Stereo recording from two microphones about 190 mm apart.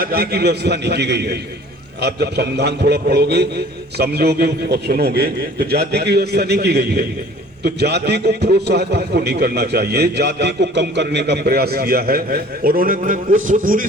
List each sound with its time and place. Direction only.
0.0 s a man's voice: 55° right (ahead or behind)